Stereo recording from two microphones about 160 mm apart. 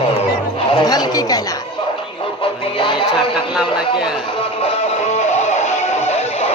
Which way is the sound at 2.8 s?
30° left (ahead or behind).